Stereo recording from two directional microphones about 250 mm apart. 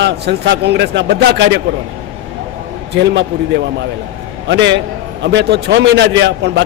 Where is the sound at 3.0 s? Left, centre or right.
Right.